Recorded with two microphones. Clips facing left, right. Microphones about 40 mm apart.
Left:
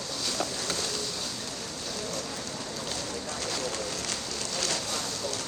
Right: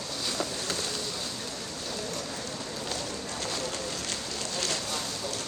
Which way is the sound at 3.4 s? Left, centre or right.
Right.